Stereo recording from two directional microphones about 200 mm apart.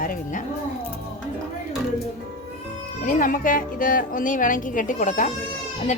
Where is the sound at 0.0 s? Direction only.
45° left (ahead or behind).